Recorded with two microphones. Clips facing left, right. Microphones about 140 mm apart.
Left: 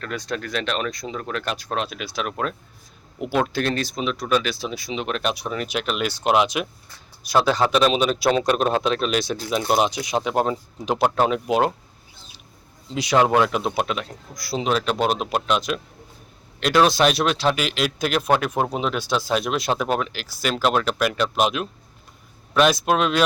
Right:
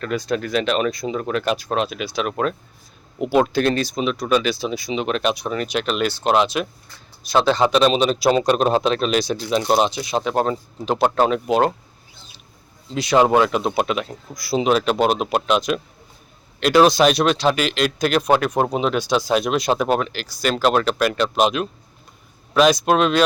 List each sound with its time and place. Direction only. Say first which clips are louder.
0.0 s speech: right 6 dB; 5° right (ahead or behind)
7.6 s a man's voice: right 3 dB; 15° right (ahead or behind)
7.9 s a man's voice: right 2 dB; 30° right (ahead or behind)
8.2 s speech: right 4 dB; 5° right (ahead or behind)
12.9 s speech: right 2 dB; 10° left (ahead or behind)
13.1 s speech: right 3 dB; 5° right (ahead or behind)